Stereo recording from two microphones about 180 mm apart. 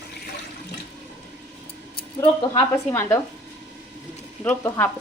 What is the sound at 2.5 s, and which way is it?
Speech, 15° left (ahead or behind).